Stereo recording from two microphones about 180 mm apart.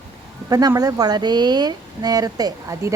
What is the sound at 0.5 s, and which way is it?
A woman's voice, 20° right (ahead or behind).